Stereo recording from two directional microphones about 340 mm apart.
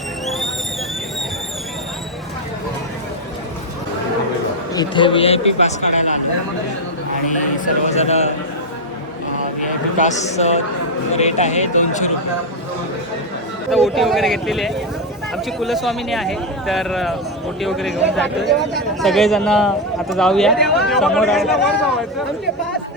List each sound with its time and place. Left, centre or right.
4.7 s a man's voice: centre
7.9 s speech: centre
10.0 s speech: left
13.7 s a man's voice: centre